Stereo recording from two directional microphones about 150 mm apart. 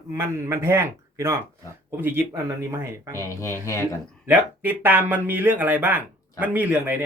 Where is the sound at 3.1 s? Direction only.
20° left (ahead or behind).